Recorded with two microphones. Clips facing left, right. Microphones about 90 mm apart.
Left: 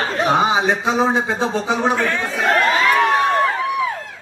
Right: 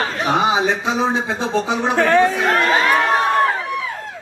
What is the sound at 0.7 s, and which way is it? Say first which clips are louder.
Speech: left 1 dB; 45° left (ahead or behind).